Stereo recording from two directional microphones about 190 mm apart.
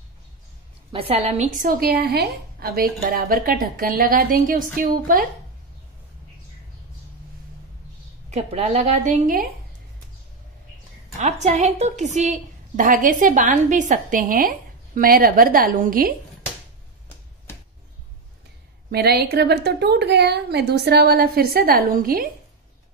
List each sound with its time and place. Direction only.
0.9 s a woman's voice: 30° right (ahead or behind); by 5.3 s 45° right (ahead or behind)
8.3 s a woman's voice: 35° right (ahead or behind)
11.1 s a woman's voice: 35° right (ahead or behind)
18.9 s a woman's voice: 55° right (ahead or behind)